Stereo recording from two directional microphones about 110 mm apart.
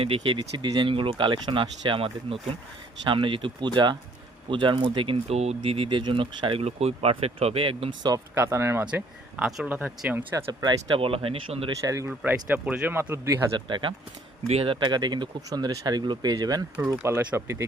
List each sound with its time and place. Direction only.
0.0 s speech: 55° right (ahead or behind)
0.5 s speech: 40° right (ahead or behind)
2.0 s speech: 55° right (ahead or behind)
8.4 s speech: 25° right (ahead or behind)
8.8 s speech: 10° right (ahead or behind)
10.9 s speech: 55° right (ahead or behind)
11.8 s speech: 30° right (ahead or behind)
12.2 s speech: 15° right (ahead or behind)
13.7 s speech: 45° right (ahead or behind)
14.4 s speech: 65° right (ahead or behind); by 16.6 s 35° right (ahead or behind)
16.9 s speech: 20° right (ahead or behind)